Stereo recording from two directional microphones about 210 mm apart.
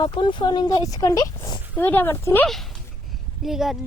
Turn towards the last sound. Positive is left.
turn(degrees=0)  # may be behind; listen again after turning